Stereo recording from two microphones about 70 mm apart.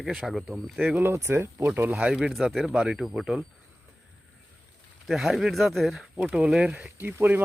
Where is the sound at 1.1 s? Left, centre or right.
Right.